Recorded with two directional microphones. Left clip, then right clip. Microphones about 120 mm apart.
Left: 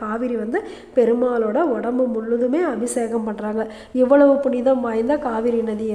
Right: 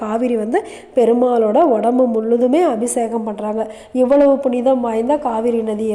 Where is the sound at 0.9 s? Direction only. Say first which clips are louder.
Right 4 dB; 10° right (ahead or behind).